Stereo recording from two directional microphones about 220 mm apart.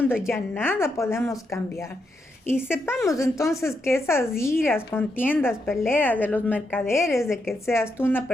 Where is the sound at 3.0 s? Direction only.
15° left (ahead or behind).